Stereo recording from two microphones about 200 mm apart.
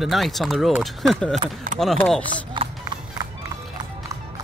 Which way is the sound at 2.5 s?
20° right (ahead or behind).